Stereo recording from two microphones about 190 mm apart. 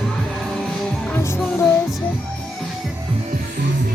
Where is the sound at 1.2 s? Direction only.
10° left (ahead or behind).